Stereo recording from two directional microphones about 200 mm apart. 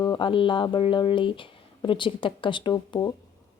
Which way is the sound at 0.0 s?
20° left (ahead or behind).